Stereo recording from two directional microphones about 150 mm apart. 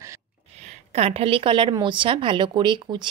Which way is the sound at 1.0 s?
40° right (ahead or behind).